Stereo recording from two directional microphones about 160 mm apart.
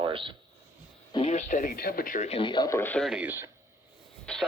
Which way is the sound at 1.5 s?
60° left (ahead or behind).